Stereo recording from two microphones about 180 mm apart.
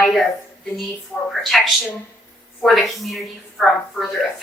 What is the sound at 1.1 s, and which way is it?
Speech, 15° left (ahead or behind).